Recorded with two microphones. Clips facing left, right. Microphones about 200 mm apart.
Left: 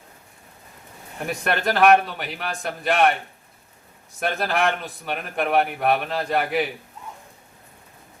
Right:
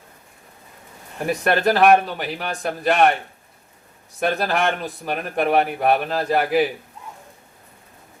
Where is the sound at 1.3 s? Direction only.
Centre (ahead or behind).